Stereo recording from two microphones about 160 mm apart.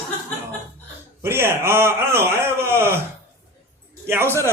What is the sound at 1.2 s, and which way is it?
A man's voice, 15° right (ahead or behind).